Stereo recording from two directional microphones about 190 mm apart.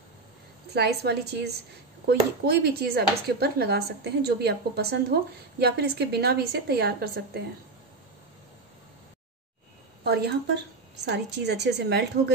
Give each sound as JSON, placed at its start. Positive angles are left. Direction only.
{"t": 0.7, "sound": "speech", "side_deg": -60}
{"t": 10.0, "sound": "speech", "side_deg": -60}